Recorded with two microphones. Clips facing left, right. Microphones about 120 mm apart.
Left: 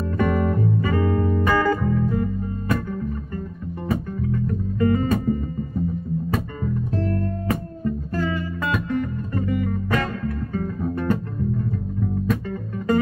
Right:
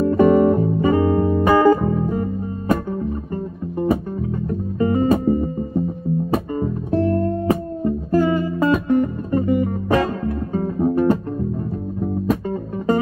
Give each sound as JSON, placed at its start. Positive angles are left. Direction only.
{"t": 0.0, "sound": "music", "side_deg": -30}
{"t": 7.1, "sound": "music", "side_deg": -30}
{"t": 8.1, "sound": "music", "side_deg": -15}
{"t": 8.4, "sound": "music", "side_deg": -30}